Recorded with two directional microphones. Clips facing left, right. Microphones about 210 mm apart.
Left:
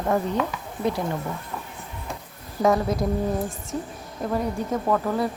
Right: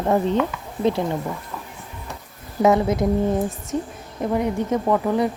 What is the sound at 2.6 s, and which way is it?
Speech, 20° right (ahead or behind).